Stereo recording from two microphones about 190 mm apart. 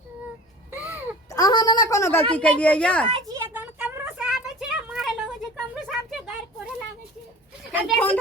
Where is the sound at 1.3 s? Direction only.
20° left (ahead or behind).